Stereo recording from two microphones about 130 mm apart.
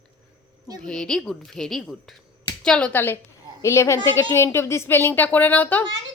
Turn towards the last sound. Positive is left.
turn(degrees=15)  # may be behind; listen again after turning